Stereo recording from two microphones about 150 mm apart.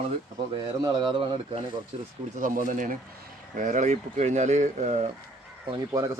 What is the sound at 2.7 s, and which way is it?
Speech, 60° right (ahead or behind).